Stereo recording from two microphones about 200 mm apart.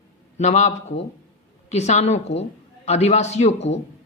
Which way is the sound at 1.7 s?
35° left (ahead or behind).